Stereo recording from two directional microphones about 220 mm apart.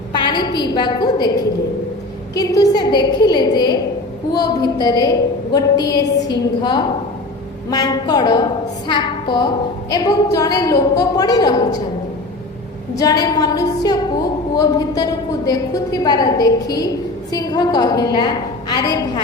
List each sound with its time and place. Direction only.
0.1 s a woman's voice: 20° left (ahead or behind)
2.3 s a woman's voice: 15° left (ahead or behind)
13.0 s a woman's voice: 15° left (ahead or behind)